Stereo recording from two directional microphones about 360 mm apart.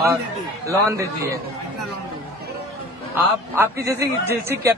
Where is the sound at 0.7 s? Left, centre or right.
Centre.